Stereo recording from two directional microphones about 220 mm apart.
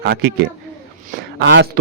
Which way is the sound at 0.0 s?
45° right (ahead or behind).